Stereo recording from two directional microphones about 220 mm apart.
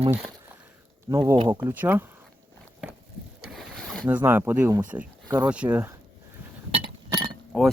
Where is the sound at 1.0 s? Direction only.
15° right (ahead or behind).